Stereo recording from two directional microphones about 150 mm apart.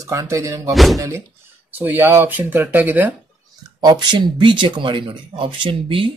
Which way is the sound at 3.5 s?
25° right (ahead or behind).